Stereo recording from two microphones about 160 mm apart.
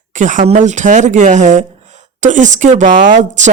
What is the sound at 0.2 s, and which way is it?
Speech, 50° right (ahead or behind).